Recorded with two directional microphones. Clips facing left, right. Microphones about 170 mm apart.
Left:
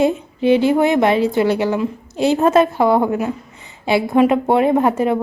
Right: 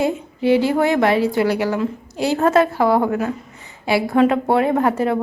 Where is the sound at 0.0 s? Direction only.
20° left (ahead or behind).